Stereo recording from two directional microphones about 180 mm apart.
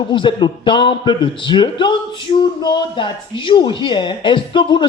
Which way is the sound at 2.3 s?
35° left (ahead or behind).